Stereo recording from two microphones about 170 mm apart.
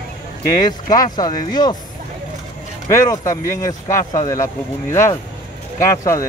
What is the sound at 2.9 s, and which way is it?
Speech, 15° left (ahead or behind).